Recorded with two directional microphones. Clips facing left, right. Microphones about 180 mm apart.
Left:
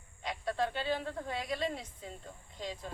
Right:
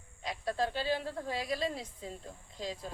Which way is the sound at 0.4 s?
35° right (ahead or behind).